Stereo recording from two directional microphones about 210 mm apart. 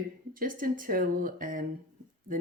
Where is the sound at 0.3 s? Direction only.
40° right (ahead or behind).